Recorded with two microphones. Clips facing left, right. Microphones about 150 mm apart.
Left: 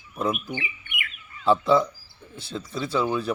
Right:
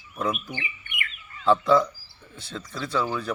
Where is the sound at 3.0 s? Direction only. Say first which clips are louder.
Left 3 dB; 20° left (ahead or behind).